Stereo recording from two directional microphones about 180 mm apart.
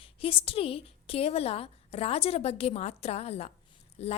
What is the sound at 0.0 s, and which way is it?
A woman's voice, 30° left (ahead or behind).